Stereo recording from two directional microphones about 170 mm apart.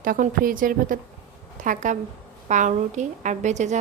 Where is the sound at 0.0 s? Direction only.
55° right (ahead or behind).